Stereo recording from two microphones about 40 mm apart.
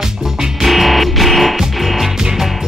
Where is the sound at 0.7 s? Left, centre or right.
Centre.